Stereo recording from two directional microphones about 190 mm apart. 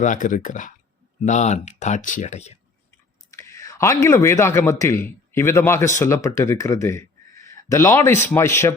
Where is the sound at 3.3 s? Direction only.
15° left (ahead or behind).